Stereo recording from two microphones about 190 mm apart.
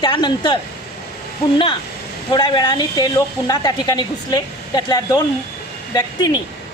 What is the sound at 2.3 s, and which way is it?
A woman's voice, 20° left (ahead or behind).